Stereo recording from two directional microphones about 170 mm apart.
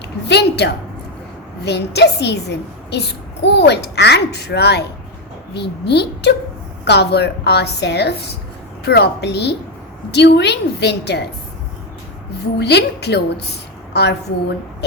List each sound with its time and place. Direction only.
0.3 s a woman's voice: 80° left
12.5 s a child's voice: 80° left